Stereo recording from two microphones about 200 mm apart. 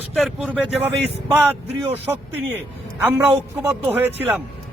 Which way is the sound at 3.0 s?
10° right (ahead or behind).